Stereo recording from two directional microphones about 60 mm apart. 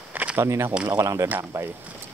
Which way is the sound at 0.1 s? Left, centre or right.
Right.